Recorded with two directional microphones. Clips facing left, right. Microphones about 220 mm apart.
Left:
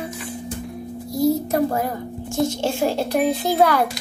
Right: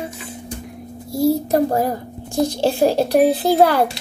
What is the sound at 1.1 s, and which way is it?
A child's voice, 30° right (ahead or behind).